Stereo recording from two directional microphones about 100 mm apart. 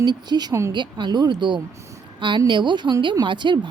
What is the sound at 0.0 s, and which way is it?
Speech, 45° right (ahead or behind).